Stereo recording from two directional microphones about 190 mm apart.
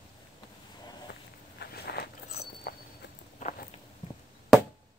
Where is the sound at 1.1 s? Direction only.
65° left (ahead or behind).